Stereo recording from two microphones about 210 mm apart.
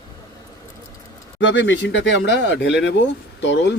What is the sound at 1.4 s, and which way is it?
Speech, 60° left (ahead or behind).